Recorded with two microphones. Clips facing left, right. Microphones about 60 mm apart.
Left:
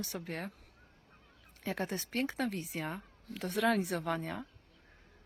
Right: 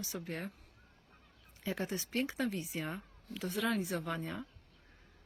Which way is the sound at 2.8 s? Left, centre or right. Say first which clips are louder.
Left 3 dB; centre.